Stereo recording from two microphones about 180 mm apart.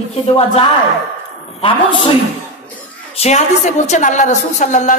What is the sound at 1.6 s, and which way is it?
Speech, 30° left (ahead or behind).